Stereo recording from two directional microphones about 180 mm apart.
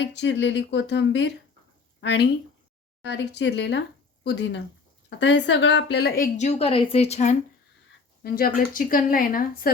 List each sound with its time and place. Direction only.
0.1 s speech: 80° left
2.0 s a woman's voice: 70° left (ahead or behind)
6.4 s a woman's voice: 35° left (ahead or behind)
8.2 s a woman's voice: 55° left (ahead or behind)